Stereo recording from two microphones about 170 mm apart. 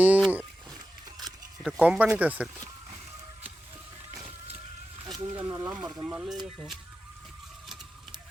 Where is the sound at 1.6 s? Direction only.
5° right (ahead or behind).